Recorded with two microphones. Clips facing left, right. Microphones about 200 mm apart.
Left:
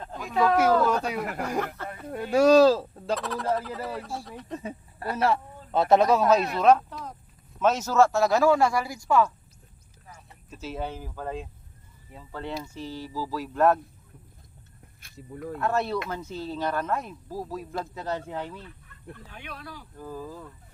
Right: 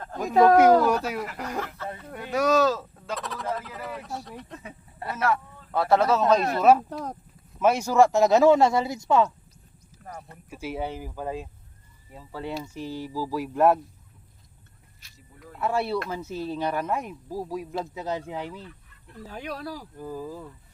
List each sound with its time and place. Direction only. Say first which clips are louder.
0.2 s speech: right 6 dB; 40° right (ahead or behind)
0.4 s speech: right 4 dB; 20° right (ahead or behind)
1.2 s speech: left 3 dB; 55° left (ahead or behind)
2.0 s speech: left 5 dB; 25° left (ahead or behind)
3.2 s speech: left 2 dB; centre (ahead or behind)
5.1 s a man's voice: left 1 dB; 30° left (ahead or behind); by 6.4 s 10° left (ahead or behind)
6.6 s speech: right 2 dB; 5° right (ahead or behind)
6.9 s speech: right 6 dB; 45° right (ahead or behind)
7.6 s speech: right 2 dB; 10° right (ahead or behind)
10.5 s speech: right 2 dB; 10° right (ahead or behind)
15.0 s a sound: left 2 dB; 55° left (ahead or behind)
15.5 s speech: right 1 dB; 5° right (ahead or behind)
19.1 s speech: right 9 dB; 35° right (ahead or behind)
20.0 s speech: even; 10° right (ahead or behind)